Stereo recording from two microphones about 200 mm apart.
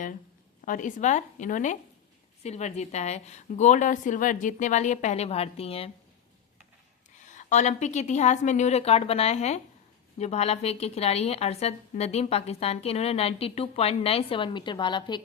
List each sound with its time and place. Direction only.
0.6 s a woman's voice: 40° left (ahead or behind)
7.3 s a woman's voice: 35° left (ahead or behind)